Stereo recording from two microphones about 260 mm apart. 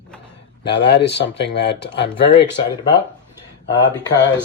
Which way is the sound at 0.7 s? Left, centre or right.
Left.